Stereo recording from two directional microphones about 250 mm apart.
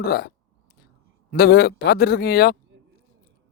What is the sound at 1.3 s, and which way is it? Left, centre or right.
A man's voice, left.